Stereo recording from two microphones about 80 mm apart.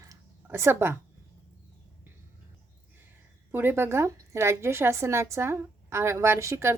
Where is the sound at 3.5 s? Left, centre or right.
Right.